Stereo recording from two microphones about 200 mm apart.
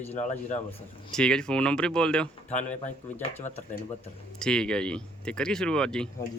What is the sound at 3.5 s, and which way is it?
Speech, 35° left (ahead or behind).